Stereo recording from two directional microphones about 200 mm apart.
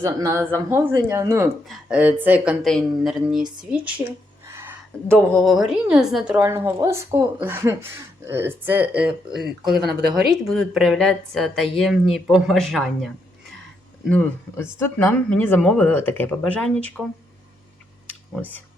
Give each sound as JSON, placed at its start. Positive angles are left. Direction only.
{"t": 0.0, "sound": "a woman's voice", "side_deg": -15}
{"t": 1.6, "sound": "speech", "side_deg": -5}
{"t": 3.4, "sound": "speech", "side_deg": -20}
{"t": 4.4, "sound": "a sound", "side_deg": -10}
{"t": 5.3, "sound": "a woman's voice", "side_deg": 0}
{"t": 9.9, "sound": "speech", "side_deg": -55}
{"t": 10.2, "sound": "speech", "side_deg": 0}
{"t": 14.1, "sound": "speech", "side_deg": 10}